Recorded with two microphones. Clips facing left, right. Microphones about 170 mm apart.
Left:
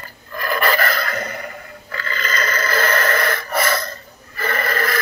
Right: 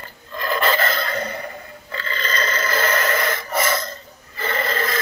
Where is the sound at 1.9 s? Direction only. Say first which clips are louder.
Left 1 dB; 25° right (ahead or behind).